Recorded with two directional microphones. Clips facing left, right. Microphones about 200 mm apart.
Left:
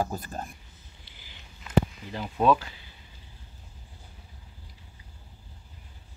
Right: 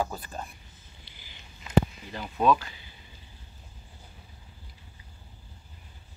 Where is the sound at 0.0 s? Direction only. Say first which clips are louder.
Left 1 dB; 45° left (ahead or behind).